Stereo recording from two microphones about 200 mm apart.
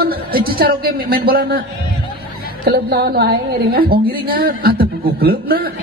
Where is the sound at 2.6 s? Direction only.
50° right (ahead or behind).